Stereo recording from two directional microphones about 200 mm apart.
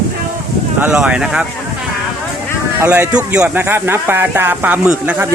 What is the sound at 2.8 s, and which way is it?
Speech, 10° right (ahead or behind).